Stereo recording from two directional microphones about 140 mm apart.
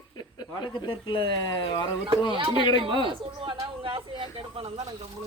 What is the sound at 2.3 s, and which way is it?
Speech, 35° right (ahead or behind).